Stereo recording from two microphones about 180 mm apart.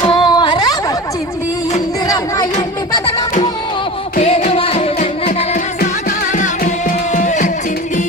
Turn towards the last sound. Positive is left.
turn(degrees=45)  # may be behind; listen again after turning